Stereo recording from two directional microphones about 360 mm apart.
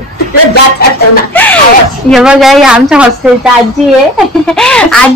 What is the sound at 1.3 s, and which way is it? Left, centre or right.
A woman's voice, centre.